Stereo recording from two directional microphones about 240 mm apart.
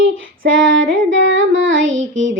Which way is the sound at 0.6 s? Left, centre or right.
Right.